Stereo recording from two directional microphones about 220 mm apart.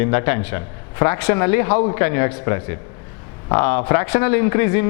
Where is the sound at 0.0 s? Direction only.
10° left (ahead or behind).